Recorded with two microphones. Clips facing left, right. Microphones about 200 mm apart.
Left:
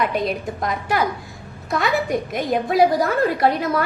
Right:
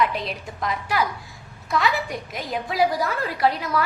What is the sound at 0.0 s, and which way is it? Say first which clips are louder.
A woman's voice: left 3 dB; 50° left (ahead or behind).